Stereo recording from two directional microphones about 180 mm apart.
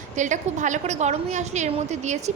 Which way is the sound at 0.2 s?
45° right (ahead or behind).